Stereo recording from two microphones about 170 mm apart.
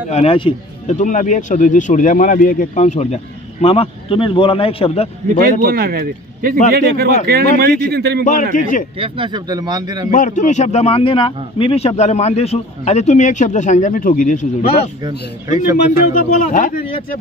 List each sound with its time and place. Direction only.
0.1 s a man's voice: 35° left (ahead or behind)
0.8 s a man's voice: 45° left (ahead or behind)
5.4 s speech: 60° right (ahead or behind)
8.2 s speech: 50° left (ahead or behind)
8.9 s speech: 30° right (ahead or behind)
10.1 s a man's voice: 50° left (ahead or behind)
15.0 s speech: 20° right (ahead or behind)
16.2 s speech: 50° left (ahead or behind)